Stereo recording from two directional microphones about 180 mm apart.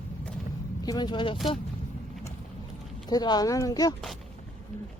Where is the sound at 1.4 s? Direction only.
Centre (ahead or behind).